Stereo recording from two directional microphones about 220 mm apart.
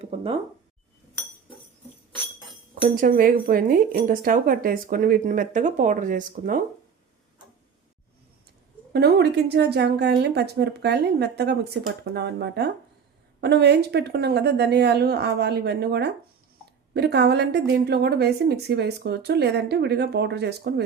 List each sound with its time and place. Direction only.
0.0 s speech: 25° right (ahead or behind)
2.9 s speech: 40° right (ahead or behind)
8.9 s a woman's voice: 45° right (ahead or behind)